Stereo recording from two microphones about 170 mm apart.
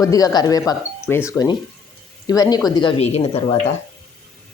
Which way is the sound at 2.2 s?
20° left (ahead or behind).